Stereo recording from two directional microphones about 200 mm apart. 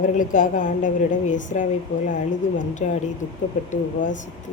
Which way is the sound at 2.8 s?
35° left (ahead or behind).